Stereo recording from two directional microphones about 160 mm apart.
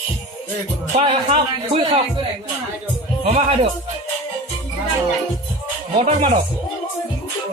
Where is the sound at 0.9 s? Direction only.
35° right (ahead or behind).